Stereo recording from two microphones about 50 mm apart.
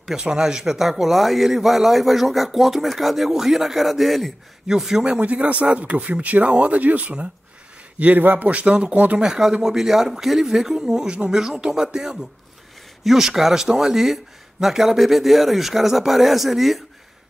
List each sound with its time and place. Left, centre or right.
0.0 s speech: centre
5.2 s a man's voice: right
8.5 s speech: right
9.2 s speech: centre